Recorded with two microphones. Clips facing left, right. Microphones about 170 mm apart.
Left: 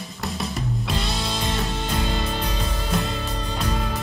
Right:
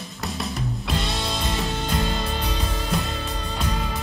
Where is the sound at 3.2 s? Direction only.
Centre (ahead or behind).